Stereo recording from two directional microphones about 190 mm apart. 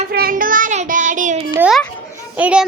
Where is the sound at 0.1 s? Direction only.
50° right (ahead or behind).